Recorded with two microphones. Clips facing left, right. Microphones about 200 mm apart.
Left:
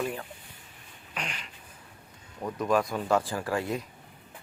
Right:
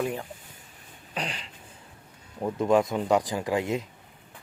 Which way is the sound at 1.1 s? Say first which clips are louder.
Right 4 dB; 35° right (ahead or behind).